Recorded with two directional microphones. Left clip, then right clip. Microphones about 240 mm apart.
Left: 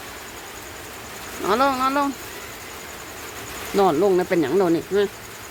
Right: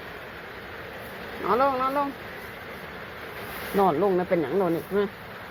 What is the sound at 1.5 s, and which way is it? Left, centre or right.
Speech, left.